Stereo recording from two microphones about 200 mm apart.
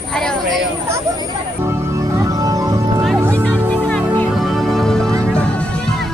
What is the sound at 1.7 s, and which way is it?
Music, 15° right (ahead or behind).